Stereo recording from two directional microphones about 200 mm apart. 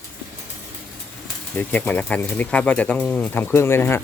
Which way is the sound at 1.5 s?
10° left (ahead or behind).